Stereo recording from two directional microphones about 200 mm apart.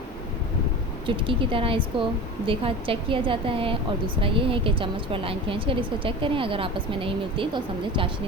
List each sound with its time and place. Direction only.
1.0 s a woman's voice: 25° right (ahead or behind)